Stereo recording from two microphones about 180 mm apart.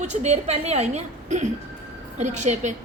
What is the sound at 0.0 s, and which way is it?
A woman's voice, 40° right (ahead or behind).